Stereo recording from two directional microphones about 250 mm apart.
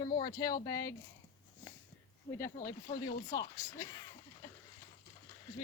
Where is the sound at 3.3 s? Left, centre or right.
Centre.